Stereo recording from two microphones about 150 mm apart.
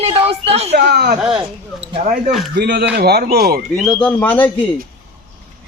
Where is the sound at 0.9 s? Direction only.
90° right.